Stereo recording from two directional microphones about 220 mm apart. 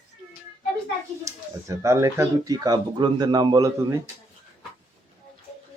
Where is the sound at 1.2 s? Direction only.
15° right (ahead or behind).